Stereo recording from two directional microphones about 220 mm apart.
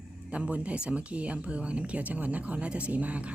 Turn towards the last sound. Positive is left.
turn(degrees=-5)  # may be behind; listen again after turning